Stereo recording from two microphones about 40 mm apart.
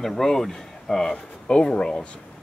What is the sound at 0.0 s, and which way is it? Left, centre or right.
Speech, centre.